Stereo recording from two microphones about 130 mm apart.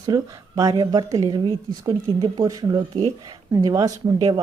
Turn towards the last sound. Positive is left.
turn(degrees=-30)  # may be behind; listen again after turning